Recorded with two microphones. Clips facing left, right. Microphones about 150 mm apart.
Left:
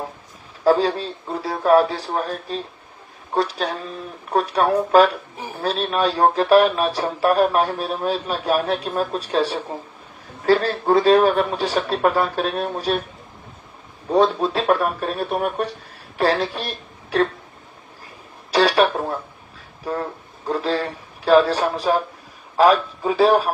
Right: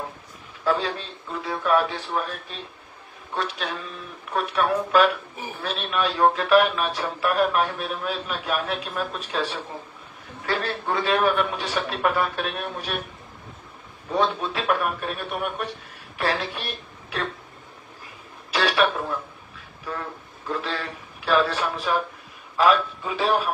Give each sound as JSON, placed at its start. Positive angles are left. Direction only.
{"t": 0.7, "sound": "speech", "side_deg": 35}
{"t": 14.1, "sound": "a woman's voice", "side_deg": 35}
{"t": 18.5, "sound": "radio", "side_deg": 40}
{"t": 19.8, "sound": "speech", "side_deg": 40}